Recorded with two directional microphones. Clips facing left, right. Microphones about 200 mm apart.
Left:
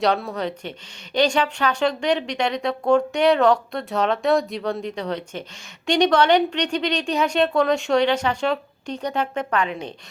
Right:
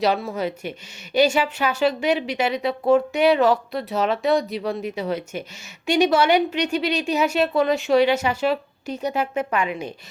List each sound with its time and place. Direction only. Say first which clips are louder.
0.0 s a woman's voice: even; centre (ahead or behind)